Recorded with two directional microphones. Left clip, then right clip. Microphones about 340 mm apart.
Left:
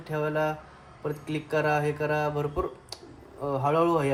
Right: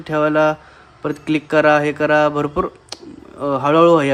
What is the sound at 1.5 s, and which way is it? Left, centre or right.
Speech, right.